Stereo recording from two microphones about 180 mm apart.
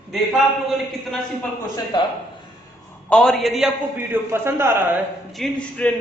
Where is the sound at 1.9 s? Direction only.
25° left (ahead or behind).